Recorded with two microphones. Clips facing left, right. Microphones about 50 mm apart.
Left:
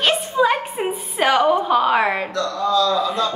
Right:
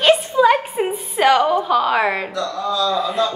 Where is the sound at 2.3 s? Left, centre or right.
Centre.